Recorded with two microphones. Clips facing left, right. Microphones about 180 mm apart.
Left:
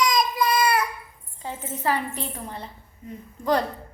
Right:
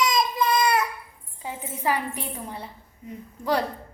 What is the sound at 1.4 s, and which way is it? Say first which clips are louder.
A woman's voice: left 1 dB; 10° right (ahead or behind).